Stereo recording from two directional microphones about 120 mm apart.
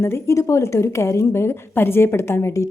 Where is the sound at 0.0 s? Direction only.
20° left (ahead or behind).